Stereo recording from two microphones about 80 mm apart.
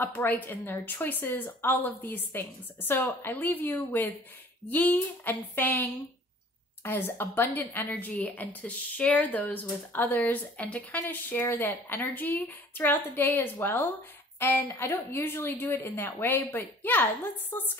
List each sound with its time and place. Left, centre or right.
0.0 s a woman's voice: left